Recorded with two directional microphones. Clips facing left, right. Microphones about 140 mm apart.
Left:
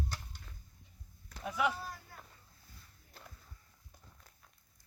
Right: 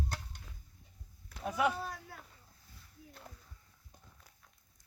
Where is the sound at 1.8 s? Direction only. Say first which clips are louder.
Right 4 dB; 80° right.